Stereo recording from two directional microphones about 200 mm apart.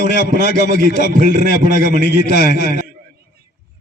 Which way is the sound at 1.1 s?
55° left (ahead or behind).